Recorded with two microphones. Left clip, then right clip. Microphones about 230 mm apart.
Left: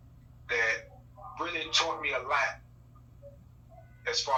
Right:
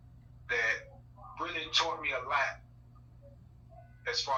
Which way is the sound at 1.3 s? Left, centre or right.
Left.